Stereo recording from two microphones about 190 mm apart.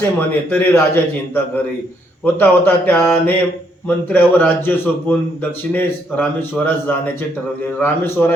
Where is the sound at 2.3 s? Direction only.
10° left (ahead or behind).